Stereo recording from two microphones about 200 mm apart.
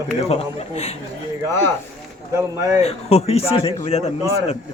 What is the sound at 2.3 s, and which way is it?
Speech, 15° right (ahead or behind).